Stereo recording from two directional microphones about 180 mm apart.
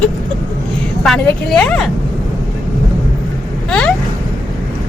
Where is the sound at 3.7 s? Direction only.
5° left (ahead or behind).